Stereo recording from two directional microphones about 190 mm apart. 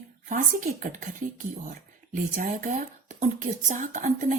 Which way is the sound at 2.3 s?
45° right (ahead or behind).